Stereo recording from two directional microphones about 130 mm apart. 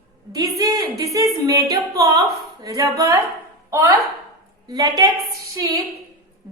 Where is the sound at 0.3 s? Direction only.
25° right (ahead or behind).